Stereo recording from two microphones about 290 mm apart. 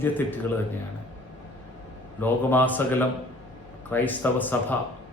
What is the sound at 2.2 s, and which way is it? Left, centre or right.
Speech, centre.